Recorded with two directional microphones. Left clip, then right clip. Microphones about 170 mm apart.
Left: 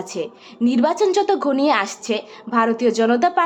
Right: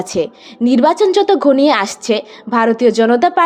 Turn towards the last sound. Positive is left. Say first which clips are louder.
# right 5 dB
turn(degrees=-25)  # may be behind; listen again after turning